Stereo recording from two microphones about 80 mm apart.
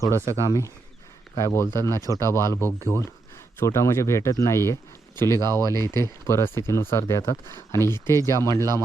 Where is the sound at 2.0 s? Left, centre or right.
Right.